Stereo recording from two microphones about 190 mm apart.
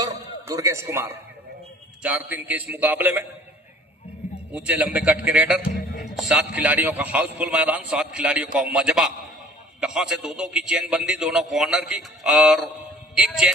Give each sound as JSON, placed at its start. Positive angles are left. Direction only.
{"t": 0.0, "sound": "music", "side_deg": -15}
{"t": 2.0, "sound": "a man's voice", "side_deg": -5}
{"t": 4.5, "sound": "a man's voice", "side_deg": -5}